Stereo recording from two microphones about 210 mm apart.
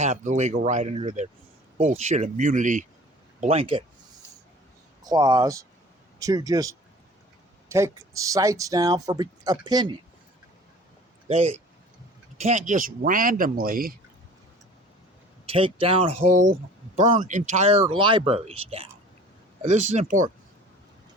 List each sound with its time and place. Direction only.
0.0 s speech: 35° right (ahead or behind)
5.0 s speech: 20° right (ahead or behind)
7.7 s speech: 15° right (ahead or behind)
11.3 s speech: 30° right (ahead or behind)
15.4 s speech: 25° right (ahead or behind)
19.6 s speech: 35° right (ahead or behind)